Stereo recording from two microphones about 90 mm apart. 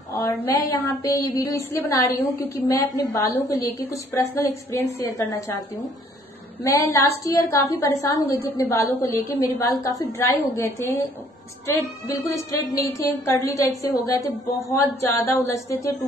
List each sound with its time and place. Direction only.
0.1 s a woman's voice: 35° left (ahead or behind)
6.6 s a woman's voice: 35° left (ahead or behind)
12.1 s a woman's voice: 40° left (ahead or behind)